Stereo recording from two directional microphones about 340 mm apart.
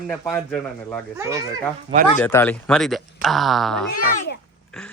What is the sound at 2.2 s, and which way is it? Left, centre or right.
Speech, centre.